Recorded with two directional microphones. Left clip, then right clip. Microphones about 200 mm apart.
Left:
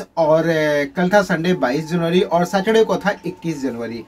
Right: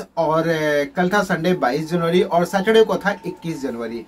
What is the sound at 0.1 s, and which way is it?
Speech, 5° left (ahead or behind).